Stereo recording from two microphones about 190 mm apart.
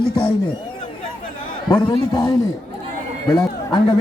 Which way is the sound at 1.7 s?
20° left (ahead or behind).